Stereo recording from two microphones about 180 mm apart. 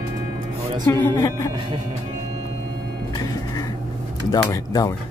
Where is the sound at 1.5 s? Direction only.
30° right (ahead or behind).